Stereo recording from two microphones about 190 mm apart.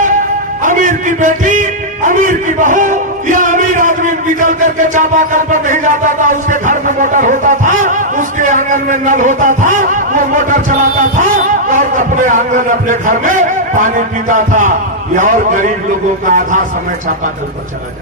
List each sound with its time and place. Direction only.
0.6 s music: 45° right (ahead or behind)
2.0 s a man's voice: 45° right (ahead or behind)